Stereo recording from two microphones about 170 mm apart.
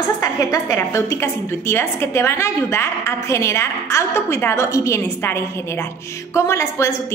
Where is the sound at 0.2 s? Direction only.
20° left (ahead or behind).